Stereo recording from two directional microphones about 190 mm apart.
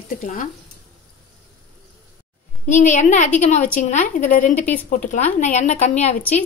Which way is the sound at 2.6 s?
40° left (ahead or behind).